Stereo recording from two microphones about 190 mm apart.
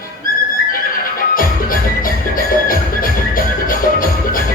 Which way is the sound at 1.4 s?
45° left (ahead or behind).